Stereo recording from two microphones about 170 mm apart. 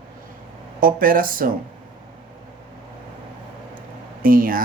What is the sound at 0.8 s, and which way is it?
Speech, 55° right (ahead or behind).